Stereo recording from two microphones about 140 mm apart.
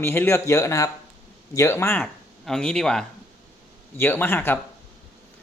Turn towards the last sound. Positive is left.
turn(degrees=15)  # may be behind; listen again after turning